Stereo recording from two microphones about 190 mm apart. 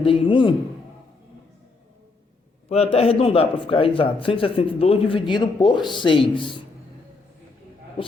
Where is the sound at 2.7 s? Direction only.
30° left (ahead or behind).